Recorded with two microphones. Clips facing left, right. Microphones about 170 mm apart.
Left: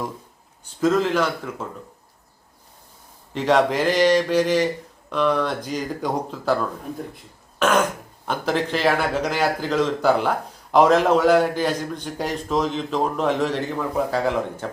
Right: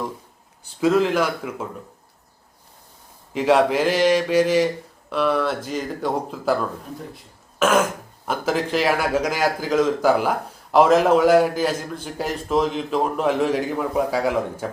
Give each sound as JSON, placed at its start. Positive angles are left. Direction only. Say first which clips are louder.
{"t": 0.6, "sound": "speech", "louder": "right 1 dB", "side_deg": -10}
{"t": 3.3, "sound": "a man's voice", "louder": "right 1 dB", "side_deg": -5}
{"t": 7.6, "sound": "a man's voice", "louder": "right 1 dB", "side_deg": -5}